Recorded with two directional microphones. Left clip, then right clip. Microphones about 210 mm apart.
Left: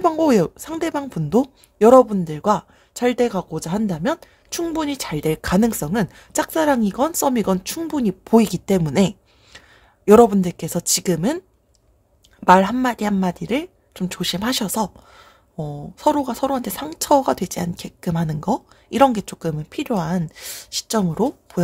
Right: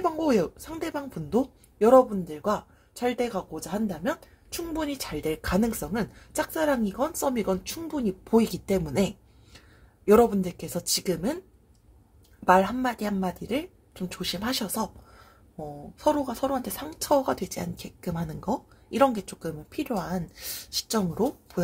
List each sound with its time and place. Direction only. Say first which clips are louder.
0.0 s a woman's voice: left 8 dB; 40° left (ahead or behind)
12.4 s a woman's voice: left 7 dB; 40° left (ahead or behind)